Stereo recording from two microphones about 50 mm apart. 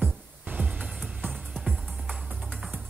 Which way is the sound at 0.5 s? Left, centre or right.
Right.